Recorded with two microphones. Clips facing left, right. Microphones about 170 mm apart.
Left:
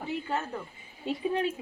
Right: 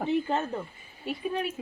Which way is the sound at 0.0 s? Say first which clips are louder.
Right 6 dB; 25° right (ahead or behind).